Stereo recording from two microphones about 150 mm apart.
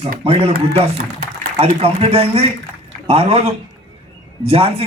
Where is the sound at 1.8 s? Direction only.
45° right (ahead or behind).